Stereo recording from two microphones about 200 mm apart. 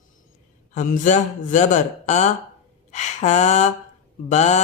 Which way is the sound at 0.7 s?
40° left (ahead or behind).